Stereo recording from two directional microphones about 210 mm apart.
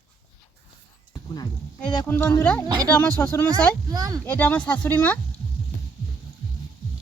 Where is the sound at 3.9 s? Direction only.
15° right (ahead or behind).